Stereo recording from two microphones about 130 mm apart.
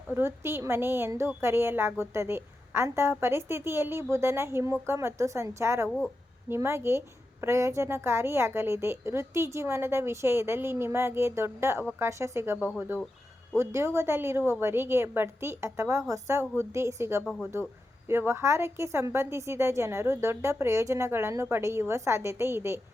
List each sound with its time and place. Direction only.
0.1 s a woman's voice: 20° right (ahead or behind)
13.6 s a woman's voice: 20° right (ahead or behind)